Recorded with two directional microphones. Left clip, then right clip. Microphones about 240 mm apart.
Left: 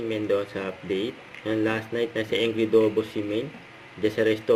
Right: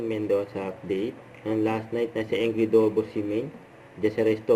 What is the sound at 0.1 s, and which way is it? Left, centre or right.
Speech, centre.